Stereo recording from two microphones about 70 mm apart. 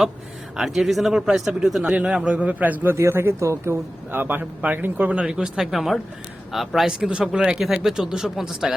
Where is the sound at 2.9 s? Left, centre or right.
Right; by 5.6 s centre.